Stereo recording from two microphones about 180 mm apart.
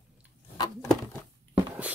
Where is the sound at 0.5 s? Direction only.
25° left (ahead or behind).